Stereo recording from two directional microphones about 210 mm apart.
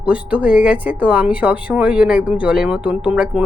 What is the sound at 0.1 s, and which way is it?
A woman's voice, 5° right (ahead or behind).